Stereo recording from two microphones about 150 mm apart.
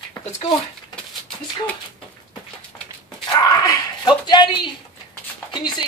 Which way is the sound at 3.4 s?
25° left (ahead or behind).